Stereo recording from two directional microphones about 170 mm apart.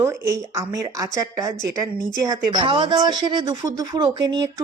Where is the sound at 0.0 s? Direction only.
20° right (ahead or behind).